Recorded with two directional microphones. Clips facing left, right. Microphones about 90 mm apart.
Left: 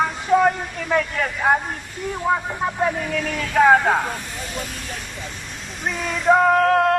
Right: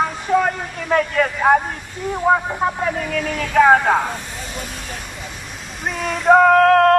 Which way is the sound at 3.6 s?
20° right (ahead or behind).